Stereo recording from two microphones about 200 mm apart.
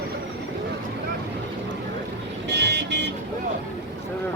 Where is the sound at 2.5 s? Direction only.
55° right (ahead or behind).